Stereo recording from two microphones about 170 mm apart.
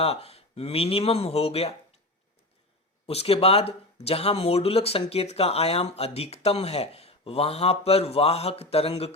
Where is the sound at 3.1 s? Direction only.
35° left (ahead or behind).